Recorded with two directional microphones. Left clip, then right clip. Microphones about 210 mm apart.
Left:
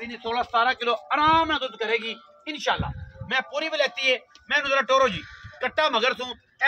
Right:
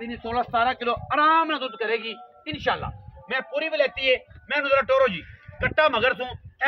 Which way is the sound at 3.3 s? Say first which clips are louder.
Right 1 dB; 20° right (ahead or behind).